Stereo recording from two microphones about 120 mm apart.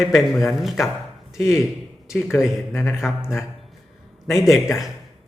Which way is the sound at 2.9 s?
5° right (ahead or behind).